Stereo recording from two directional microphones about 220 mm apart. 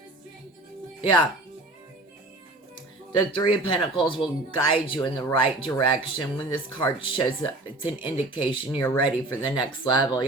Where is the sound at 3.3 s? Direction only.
20° left (ahead or behind).